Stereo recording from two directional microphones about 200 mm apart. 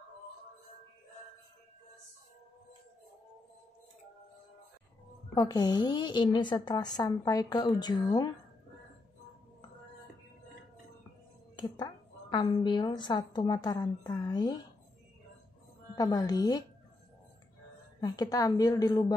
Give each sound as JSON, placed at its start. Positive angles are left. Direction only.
{"t": 5.3, "sound": "a woman's voice", "side_deg": 20}
{"t": 11.5, "sound": "a woman's voice", "side_deg": 20}
{"t": 15.9, "sound": "a woman's voice", "side_deg": 15}
{"t": 18.0, "sound": "a woman's voice", "side_deg": 20}